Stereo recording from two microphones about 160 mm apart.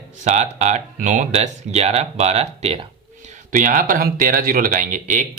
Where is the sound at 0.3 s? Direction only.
45° right (ahead or behind).